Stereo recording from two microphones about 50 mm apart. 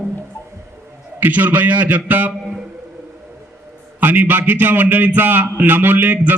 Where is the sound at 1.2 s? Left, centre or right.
Right.